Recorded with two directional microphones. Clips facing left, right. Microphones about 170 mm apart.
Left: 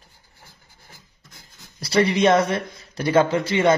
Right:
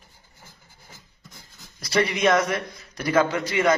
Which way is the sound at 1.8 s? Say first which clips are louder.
Left 4 dB; 30° left (ahead or behind).